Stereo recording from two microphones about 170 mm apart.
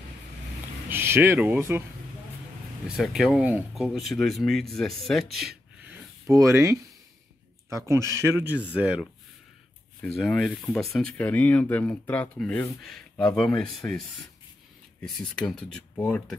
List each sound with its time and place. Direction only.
0.8 s speech: 15° right (ahead or behind)
3.0 s speech: centre (ahead or behind)
6.2 s speech: 15° right (ahead or behind)
10.0 s speech: centre (ahead or behind)